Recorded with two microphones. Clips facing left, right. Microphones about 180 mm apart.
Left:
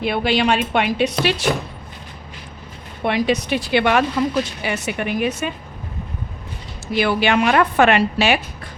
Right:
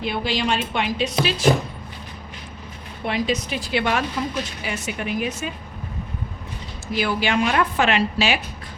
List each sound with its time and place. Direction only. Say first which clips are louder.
0.0 s a woman's voice: left 5 dB; 65° left (ahead or behind)
3.0 s a woman's voice: left 4 dB; 65° left (ahead or behind)
6.9 s a woman's voice: left 4 dB; 65° left (ahead or behind)